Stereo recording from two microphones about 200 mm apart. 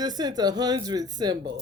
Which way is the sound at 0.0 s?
20° right (ahead or behind).